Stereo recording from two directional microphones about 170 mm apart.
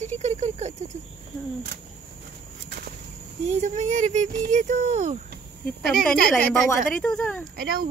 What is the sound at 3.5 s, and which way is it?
Speech, 45° right (ahead or behind).